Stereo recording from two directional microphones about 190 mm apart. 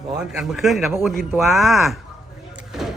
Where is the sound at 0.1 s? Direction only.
5° right (ahead or behind).